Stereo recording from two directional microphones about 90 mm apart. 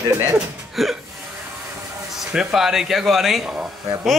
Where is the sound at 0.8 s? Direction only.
Centre (ahead or behind).